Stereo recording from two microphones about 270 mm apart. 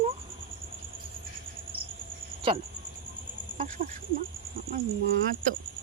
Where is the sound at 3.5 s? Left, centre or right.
Right.